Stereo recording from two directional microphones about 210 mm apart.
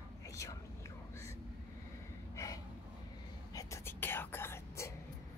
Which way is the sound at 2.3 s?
15° left (ahead or behind).